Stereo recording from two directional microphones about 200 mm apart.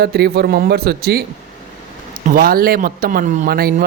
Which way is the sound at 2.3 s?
45° right (ahead or behind).